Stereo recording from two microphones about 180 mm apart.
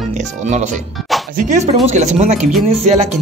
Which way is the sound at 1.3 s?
45° right (ahead or behind).